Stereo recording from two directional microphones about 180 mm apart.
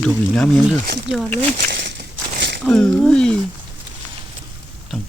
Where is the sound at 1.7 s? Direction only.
70° right (ahead or behind).